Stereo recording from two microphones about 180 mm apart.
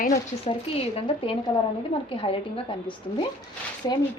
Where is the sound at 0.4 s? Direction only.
30° left (ahead or behind).